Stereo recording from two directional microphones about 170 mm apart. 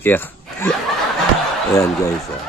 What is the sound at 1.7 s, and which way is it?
Speech, 15° left (ahead or behind).